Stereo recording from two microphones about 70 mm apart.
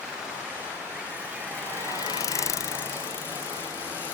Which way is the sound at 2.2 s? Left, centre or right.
Left.